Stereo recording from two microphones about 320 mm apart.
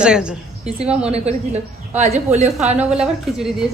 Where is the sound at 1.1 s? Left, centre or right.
Centre.